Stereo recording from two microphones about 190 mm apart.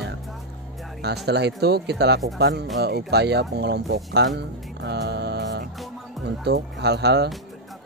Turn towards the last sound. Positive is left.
turn(degrees=-60)  # may be behind; listen again after turning